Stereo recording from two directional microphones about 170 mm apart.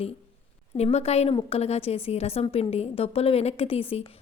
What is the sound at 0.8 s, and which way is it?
A woman's voice, 40° left (ahead or behind).